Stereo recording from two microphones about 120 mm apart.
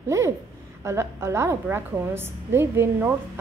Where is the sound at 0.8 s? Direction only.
20° right (ahead or behind).